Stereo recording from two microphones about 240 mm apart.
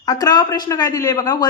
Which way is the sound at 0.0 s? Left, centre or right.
Centre.